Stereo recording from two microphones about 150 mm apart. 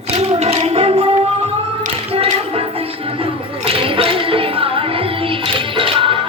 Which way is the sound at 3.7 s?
35° right (ahead or behind).